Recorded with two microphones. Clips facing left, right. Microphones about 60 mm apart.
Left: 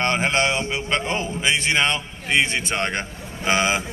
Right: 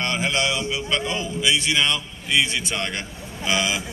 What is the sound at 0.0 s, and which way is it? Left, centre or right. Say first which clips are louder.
A man's voice: left 3 dB; left.